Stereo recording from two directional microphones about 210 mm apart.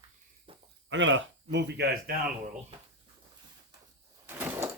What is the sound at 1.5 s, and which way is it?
Speech, 50° right (ahead or behind).